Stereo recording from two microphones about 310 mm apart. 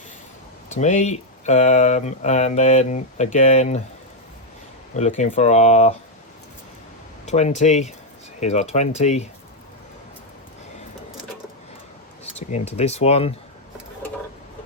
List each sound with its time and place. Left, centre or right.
0.7 s speech: left
4.9 s speech: left
7.3 s speech: left
12.2 s speech: left